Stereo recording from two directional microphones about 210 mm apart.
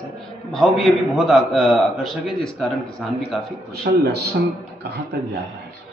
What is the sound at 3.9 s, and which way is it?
Speech, 50° right (ahead or behind).